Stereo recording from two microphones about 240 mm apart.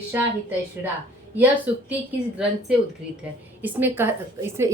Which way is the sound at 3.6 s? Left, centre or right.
Centre.